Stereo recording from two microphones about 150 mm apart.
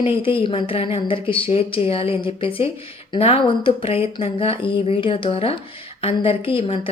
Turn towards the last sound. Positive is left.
turn(degrees=40)  # may be behind; listen again after turning